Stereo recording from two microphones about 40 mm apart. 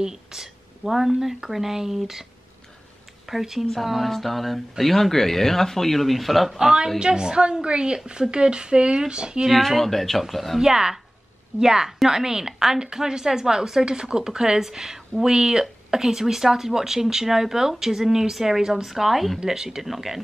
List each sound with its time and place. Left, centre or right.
0.0 s a woman's voice: centre
3.3 s speech: centre
6.5 s a woman's voice: centre
9.5 s speech: centre
10.6 s a woman's voice: centre
19.4 s a woman's voice: centre